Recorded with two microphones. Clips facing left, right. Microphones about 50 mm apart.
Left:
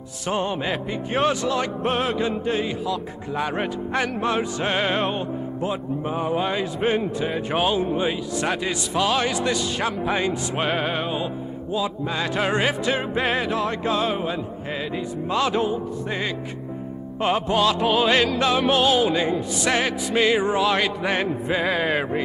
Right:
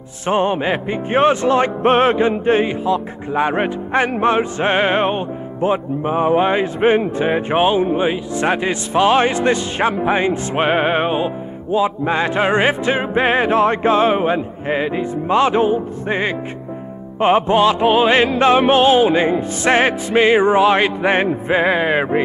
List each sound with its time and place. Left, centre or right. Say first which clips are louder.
0.3 s music: right 8 dB; right